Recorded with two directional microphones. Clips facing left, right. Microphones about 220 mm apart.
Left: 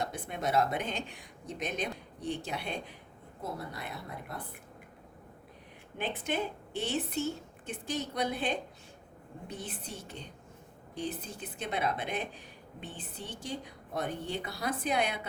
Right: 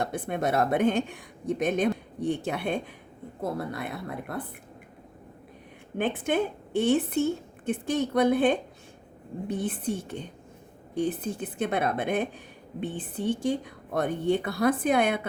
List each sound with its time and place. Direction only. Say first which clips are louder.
0.0 s speech: right 6 dB; 55° right (ahead or behind)
6.0 s speech: right 8 dB; 55° right (ahead or behind)